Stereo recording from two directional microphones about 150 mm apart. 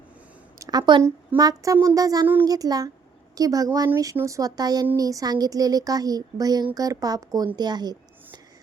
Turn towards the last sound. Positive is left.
turn(degrees=-25)  # may be behind; listen again after turning